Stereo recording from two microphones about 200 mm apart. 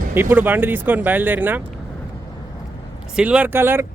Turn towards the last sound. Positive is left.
turn(degrees=-10)  # may be behind; listen again after turning